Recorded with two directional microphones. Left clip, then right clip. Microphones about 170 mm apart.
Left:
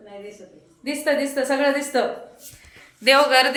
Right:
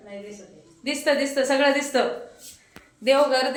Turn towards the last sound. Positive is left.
turn(degrees=0)  # may be behind; listen again after turning